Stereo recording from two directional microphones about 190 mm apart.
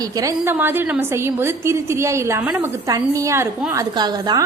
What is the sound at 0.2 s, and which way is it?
A woman's voice, 15° right (ahead or behind).